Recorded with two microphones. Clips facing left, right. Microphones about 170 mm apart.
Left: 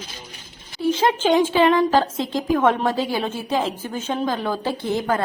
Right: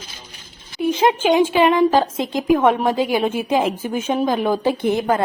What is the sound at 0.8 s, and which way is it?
A woman's voice, 15° right (ahead or behind).